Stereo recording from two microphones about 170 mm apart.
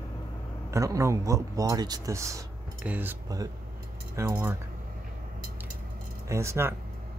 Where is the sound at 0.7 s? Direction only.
20° right (ahead or behind).